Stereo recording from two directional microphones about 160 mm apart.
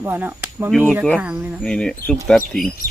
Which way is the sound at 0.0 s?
10° right (ahead or behind).